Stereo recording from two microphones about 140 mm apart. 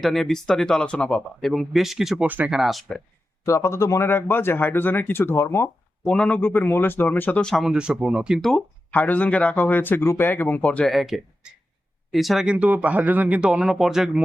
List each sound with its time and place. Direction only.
0.0 s speech: centre (ahead or behind)
3.4 s speech: 20° left (ahead or behind); by 14.3 s 5° right (ahead or behind)